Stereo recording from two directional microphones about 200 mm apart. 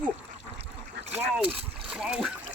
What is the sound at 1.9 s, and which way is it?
Splash, 5° right (ahead or behind).